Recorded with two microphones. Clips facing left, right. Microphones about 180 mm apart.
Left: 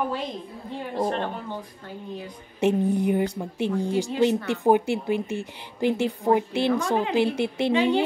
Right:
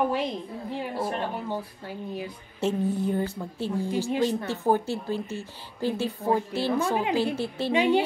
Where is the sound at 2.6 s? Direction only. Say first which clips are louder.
Left 4 dB; 15° left (ahead or behind).